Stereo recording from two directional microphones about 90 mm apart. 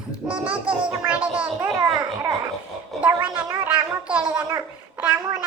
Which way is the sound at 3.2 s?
15° right (ahead or behind).